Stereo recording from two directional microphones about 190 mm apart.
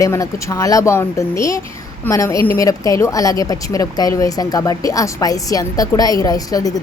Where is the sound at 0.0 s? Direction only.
15° left (ahead or behind).